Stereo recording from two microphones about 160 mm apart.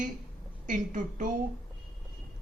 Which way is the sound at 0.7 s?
55° right (ahead or behind).